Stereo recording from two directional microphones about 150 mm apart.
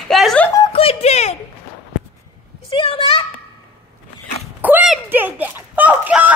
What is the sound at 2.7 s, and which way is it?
Speech, 40° left (ahead or behind).